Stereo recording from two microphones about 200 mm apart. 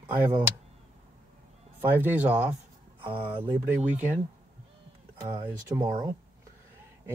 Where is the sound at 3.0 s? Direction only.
25° right (ahead or behind).